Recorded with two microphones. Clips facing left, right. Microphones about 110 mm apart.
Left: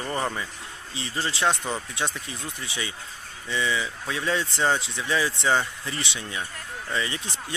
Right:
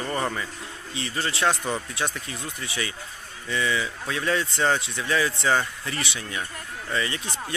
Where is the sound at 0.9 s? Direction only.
25° left (ahead or behind).